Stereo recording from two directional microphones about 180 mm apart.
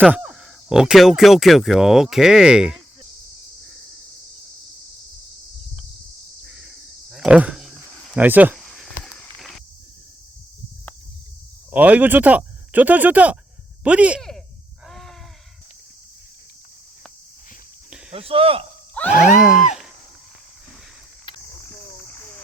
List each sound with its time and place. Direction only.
0.0 s speech: 10° right (ahead or behind)
6.4 s cricket: 5° right (ahead or behind)
8.1 s speech: 10° right (ahead or behind)
8.5 s snake: centre (ahead or behind)
11.7 s speech: 10° right (ahead or behind)
14.8 s a sound: centre (ahead or behind)
18.1 s speech: 30° right (ahead or behind)
19.0 s groan: 5° left (ahead or behind)
19.4 s speech: 5° right (ahead or behind)